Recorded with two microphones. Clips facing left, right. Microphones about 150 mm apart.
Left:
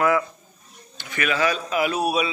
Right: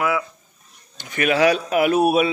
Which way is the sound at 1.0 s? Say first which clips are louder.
Right 5 dB; 50° right (ahead or behind).